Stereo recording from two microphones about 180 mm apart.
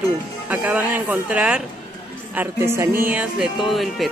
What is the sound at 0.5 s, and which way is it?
Speech, 10° right (ahead or behind).